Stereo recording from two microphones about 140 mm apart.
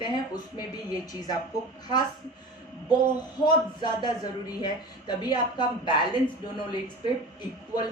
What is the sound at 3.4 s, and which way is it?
A woman's voice, 30° left (ahead or behind).